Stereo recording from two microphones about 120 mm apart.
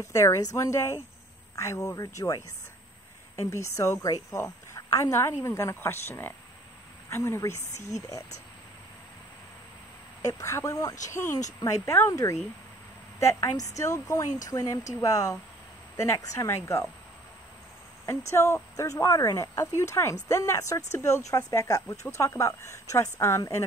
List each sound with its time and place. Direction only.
0.0 s a woman's voice: 25° left (ahead or behind)
3.4 s a woman's voice: 25° left (ahead or behind)
10.2 s a woman's voice: 25° left (ahead or behind)
18.3 s a woman's voice: 25° left (ahead or behind)